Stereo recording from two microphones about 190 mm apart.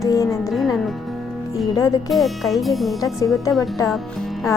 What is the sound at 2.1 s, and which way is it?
Speech, centre (ahead or behind).